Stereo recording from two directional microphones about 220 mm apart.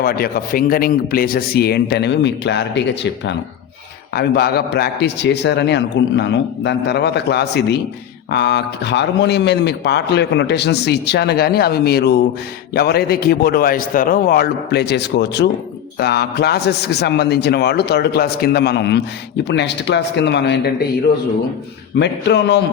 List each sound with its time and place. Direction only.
0.0 s a man's voice: 40° left (ahead or behind)
21.9 s a man's voice: 50° left (ahead or behind)